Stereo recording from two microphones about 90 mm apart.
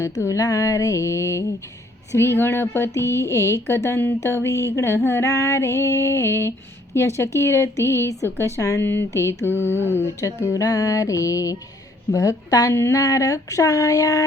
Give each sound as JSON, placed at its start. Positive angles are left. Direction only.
{"t": 0.0, "sound": "speech", "side_deg": 35}
{"t": 10.2, "sound": "speech", "side_deg": 35}